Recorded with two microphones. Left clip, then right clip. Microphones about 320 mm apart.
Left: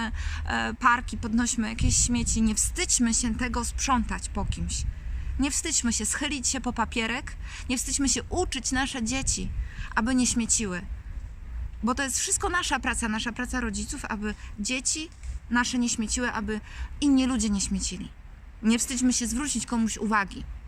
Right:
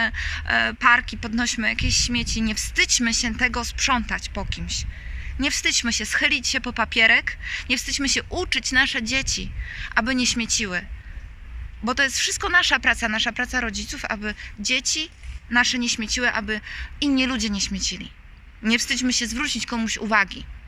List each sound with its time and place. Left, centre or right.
0.0 s speech: centre
11.9 s speech: centre